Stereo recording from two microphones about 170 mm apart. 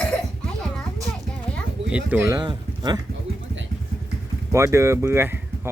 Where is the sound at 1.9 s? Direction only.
10° right (ahead or behind).